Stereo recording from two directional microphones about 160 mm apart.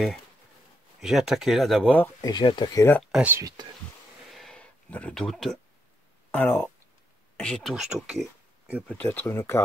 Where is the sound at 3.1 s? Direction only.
10° right (ahead or behind).